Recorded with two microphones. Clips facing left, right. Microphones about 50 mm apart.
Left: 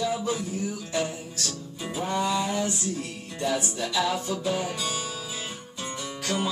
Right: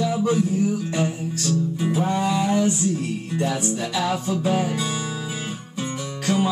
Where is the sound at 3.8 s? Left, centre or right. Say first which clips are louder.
Right 2 dB; centre.